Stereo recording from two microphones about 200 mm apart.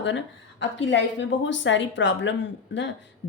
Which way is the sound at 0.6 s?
65° left (ahead or behind).